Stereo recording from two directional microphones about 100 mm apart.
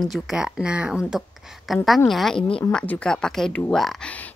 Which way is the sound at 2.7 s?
15° left (ahead or behind).